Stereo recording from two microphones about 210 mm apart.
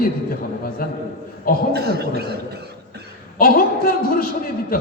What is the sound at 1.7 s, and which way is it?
Cough, 50° right (ahead or behind).